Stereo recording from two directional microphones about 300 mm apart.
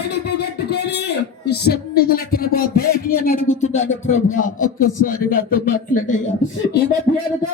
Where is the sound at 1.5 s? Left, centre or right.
Left.